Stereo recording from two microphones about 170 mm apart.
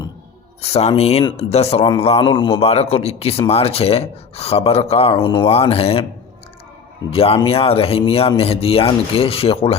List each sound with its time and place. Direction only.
0.6 s speech: 35° left (ahead or behind)
7.1 s speech: 35° left (ahead or behind)